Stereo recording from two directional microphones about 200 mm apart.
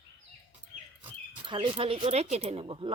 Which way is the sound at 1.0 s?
25° right (ahead or behind).